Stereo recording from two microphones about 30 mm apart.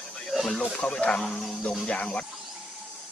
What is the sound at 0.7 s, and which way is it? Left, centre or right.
Speech, left.